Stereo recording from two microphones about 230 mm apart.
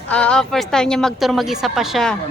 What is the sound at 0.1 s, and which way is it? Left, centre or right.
A woman's voice, centre.